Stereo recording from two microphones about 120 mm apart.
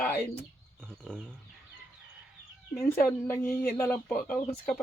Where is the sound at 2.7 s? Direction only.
20° left (ahead or behind).